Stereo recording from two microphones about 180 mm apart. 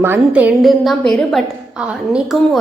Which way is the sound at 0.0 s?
10° right (ahead or behind).